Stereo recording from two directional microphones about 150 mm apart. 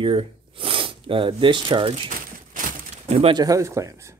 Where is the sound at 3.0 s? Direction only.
45° right (ahead or behind).